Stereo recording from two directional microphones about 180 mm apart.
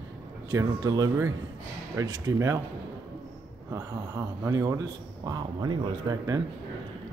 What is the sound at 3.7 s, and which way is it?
Speech, 20° right (ahead or behind).